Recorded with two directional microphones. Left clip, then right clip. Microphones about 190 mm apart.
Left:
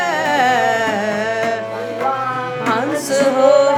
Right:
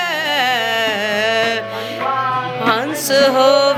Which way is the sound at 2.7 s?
30° right (ahead or behind).